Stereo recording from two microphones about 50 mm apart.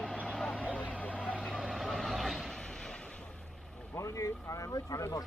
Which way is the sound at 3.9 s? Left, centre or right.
Left.